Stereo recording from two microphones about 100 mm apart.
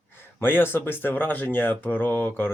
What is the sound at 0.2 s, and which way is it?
Speech, 20° left (ahead or behind).